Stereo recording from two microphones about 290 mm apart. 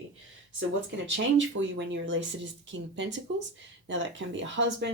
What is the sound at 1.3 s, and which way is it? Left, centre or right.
Speech, right.